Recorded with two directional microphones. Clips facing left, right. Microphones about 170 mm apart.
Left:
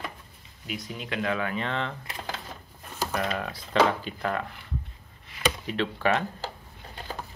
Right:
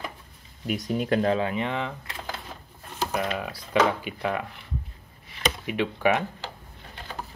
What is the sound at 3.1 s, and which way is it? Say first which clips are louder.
Speech: right 1 dB; 5° right (ahead or behind).